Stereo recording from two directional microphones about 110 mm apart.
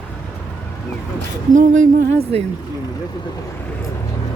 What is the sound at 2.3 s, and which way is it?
Speech, 65° right (ahead or behind).